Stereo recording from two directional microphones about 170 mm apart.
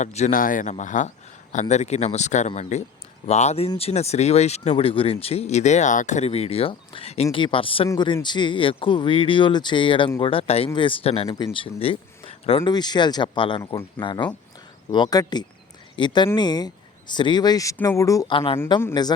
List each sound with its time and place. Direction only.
0.0 s a man's voice: 45° left (ahead or behind)